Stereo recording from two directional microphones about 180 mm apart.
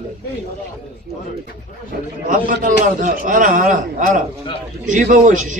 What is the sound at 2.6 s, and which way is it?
A man's voice, 45° right (ahead or behind).